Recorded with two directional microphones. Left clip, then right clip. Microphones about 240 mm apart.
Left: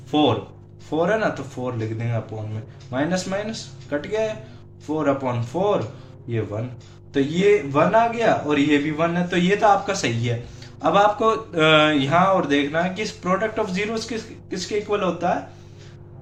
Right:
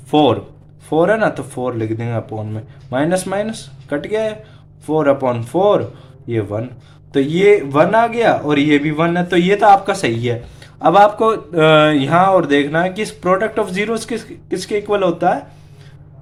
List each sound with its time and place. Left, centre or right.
0.1 s a man's voice: right